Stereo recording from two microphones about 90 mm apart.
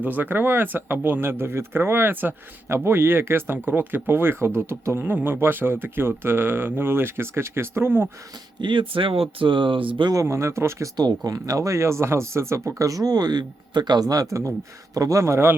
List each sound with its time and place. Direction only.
0.0 s speech: 20° right (ahead or behind)
8.6 s speech: 70° right (ahead or behind)
10.1 s speech: 35° right (ahead or behind)
10.9 s speech: 45° right (ahead or behind)
14.1 s speech: 40° right (ahead or behind)